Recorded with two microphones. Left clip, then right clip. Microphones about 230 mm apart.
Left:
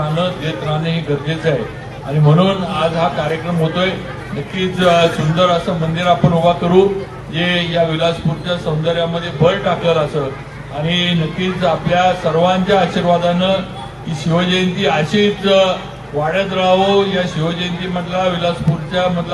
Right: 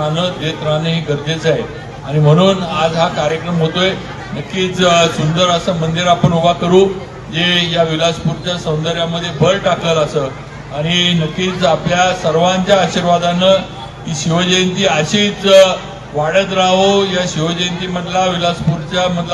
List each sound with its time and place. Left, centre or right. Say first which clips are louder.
0.8 s a man's voice: right 2 dB; right